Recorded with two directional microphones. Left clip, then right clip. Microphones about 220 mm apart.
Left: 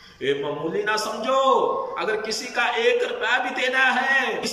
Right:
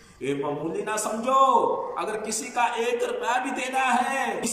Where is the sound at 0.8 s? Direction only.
20° right (ahead or behind).